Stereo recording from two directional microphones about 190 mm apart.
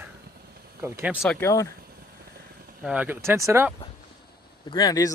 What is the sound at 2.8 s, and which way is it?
Speech, 5° right (ahead or behind).